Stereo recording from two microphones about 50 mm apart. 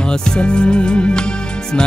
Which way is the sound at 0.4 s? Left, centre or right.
Centre.